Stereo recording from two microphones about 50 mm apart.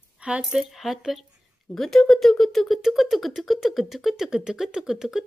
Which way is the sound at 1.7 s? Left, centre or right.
Centre.